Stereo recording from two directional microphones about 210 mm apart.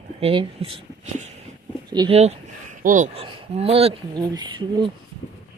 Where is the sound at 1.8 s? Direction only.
20° right (ahead or behind).